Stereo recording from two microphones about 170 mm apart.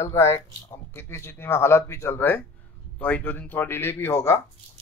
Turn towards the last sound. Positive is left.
turn(degrees=15)  # may be behind; listen again after turning